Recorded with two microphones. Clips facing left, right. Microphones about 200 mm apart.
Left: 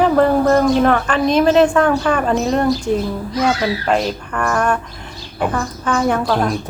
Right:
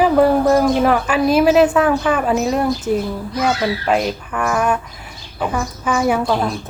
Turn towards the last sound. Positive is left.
turn(degrees=-10)  # may be behind; listen again after turning